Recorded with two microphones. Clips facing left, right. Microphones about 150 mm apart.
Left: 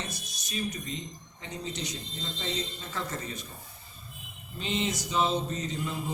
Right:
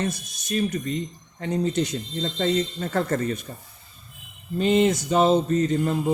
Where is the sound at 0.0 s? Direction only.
55° right (ahead or behind).